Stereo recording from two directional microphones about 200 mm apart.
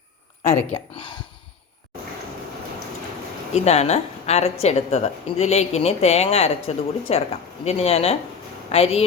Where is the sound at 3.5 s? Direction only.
35° left (ahead or behind).